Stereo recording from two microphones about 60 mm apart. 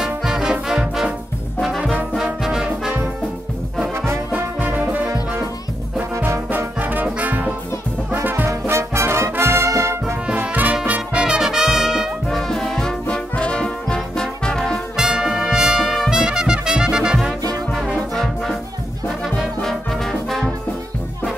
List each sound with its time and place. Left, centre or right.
0.0 s music: centre
1.6 s brass instrument: centre
4.3 s music: right
6.8 s brass instrument: right
8.5 s brass instrument: right
10.3 s brass instrument: right
10.9 s music: centre
12.3 s music: centre
13.1 s brass instrument: centre
15.0 s trumpet: centre
18.1 s music: centre